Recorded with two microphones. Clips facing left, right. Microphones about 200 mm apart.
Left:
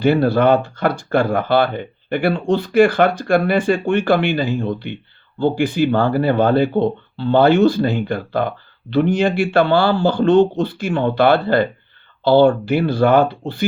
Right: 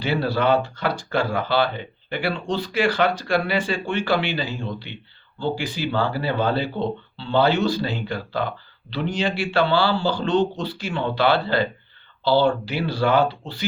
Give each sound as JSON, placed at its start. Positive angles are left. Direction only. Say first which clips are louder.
{"t": 0.0, "sound": "speech", "louder": "left 8 dB", "side_deg": 50}